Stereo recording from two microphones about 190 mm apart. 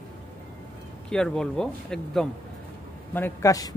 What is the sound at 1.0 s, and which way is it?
A man's voice, 5° left (ahead or behind).